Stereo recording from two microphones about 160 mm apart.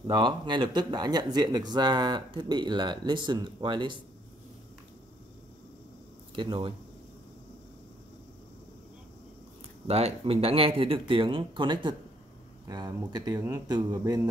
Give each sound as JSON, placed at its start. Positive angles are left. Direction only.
{"t": 0.0, "sound": "speech", "side_deg": -30}
{"t": 6.3, "sound": "speech", "side_deg": -30}
{"t": 9.8, "sound": "speech", "side_deg": -40}